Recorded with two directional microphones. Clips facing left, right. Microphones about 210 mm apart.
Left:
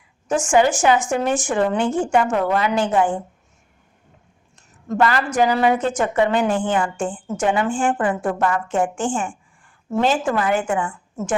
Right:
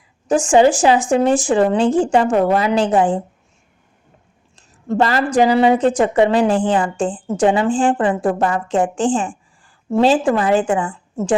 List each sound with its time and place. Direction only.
0.3 s speech: 30° right (ahead or behind)
4.5 s speech: 30° right (ahead or behind)